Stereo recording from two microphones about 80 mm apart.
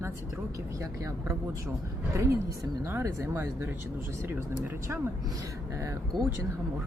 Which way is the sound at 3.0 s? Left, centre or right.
Right.